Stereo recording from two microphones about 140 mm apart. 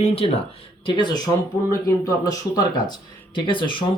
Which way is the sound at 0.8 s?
30° left (ahead or behind).